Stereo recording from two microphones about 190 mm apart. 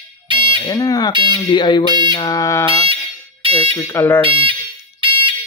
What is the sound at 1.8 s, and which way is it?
Speech, 25° right (ahead or behind).